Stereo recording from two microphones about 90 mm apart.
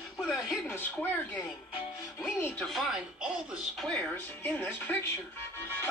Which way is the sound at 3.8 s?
5° left (ahead or behind).